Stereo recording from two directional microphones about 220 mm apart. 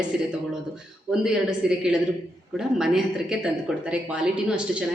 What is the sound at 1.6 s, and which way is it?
A woman's voice, 5° right (ahead or behind).